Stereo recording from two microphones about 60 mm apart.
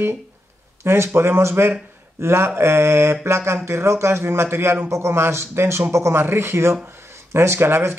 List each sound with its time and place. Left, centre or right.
0.8 s speech: right